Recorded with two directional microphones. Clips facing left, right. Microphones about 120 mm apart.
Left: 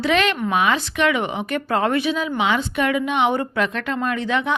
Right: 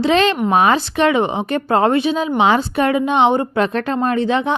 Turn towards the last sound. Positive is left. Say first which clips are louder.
# right 5 dB
turn(degrees=-30)  # may be behind; listen again after turning